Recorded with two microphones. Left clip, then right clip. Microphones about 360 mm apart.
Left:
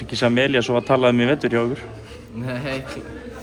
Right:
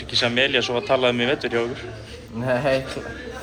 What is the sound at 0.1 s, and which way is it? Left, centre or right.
A man's voice, centre.